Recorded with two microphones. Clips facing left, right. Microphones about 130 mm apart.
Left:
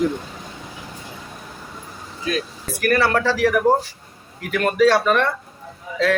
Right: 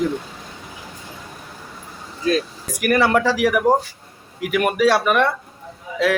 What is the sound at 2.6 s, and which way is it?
A man's voice, 15° right (ahead or behind).